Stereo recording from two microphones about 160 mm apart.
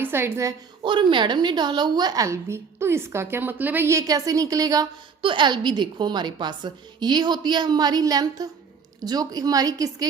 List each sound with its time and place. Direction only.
0.0 s a woman's voice: 15° right (ahead or behind)
0.8 s a woman's voice: 30° right (ahead or behind)